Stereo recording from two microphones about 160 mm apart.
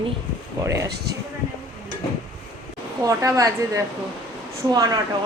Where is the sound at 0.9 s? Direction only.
90° right.